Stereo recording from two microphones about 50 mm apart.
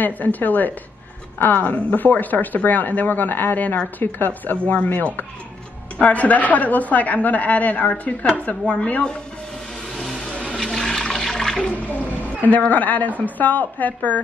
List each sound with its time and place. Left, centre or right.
0.0 s a woman's voice: left
10.6 s toilet flush: centre
12.4 s a woman's voice: left